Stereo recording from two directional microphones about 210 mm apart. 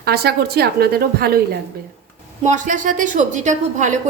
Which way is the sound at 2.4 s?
35° right (ahead or behind).